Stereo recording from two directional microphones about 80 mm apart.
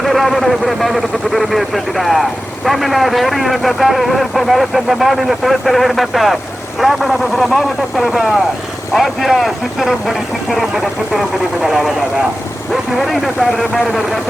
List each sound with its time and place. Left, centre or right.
0.0 s speech: centre